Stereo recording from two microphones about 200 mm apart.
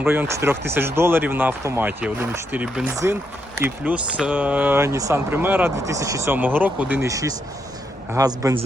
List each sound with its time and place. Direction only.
0.0 s speech: 10° right (ahead or behind)